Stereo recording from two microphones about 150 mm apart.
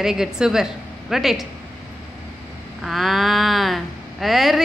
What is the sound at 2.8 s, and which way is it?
Speech, centre (ahead or behind).